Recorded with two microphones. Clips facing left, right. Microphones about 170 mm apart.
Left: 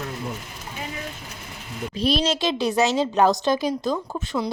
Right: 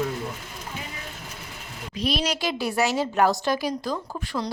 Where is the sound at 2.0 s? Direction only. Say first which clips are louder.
Left 4 dB; 30° left (ahead or behind).